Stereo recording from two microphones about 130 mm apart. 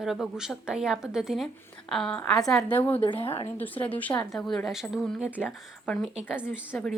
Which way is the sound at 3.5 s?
15° left (ahead or behind).